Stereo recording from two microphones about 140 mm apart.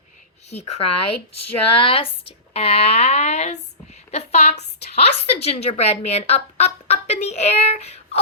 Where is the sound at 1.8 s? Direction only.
40° left (ahead or behind).